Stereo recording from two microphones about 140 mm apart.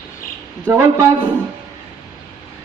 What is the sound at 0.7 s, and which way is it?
Speech, 20° right (ahead or behind).